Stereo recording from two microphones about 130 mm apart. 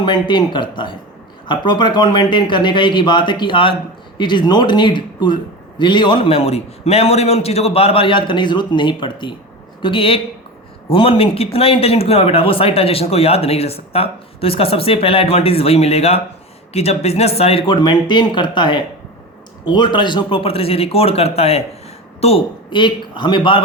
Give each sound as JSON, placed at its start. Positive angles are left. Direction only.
{"t": 0.0, "sound": "speech", "side_deg": 35}
{"t": 22.7, "sound": "speech", "side_deg": 35}